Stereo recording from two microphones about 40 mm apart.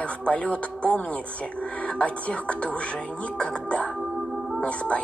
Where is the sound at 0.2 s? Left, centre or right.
Left.